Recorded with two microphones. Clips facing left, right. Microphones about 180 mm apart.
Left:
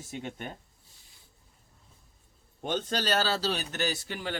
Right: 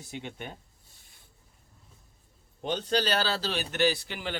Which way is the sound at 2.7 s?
45° left (ahead or behind).